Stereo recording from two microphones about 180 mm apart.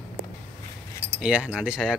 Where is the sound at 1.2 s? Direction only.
5° right (ahead or behind).